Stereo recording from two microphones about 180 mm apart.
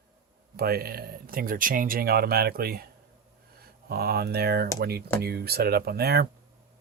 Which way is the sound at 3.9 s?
60° right (ahead or behind).